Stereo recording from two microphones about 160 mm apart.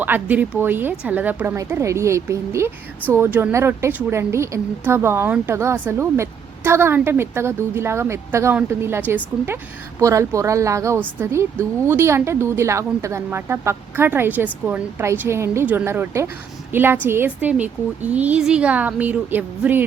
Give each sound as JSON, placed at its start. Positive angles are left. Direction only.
{"t": 0.0, "sound": "a woman's voice", "side_deg": -10}